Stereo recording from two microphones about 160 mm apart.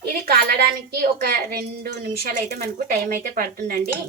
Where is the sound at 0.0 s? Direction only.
75° right (ahead or behind).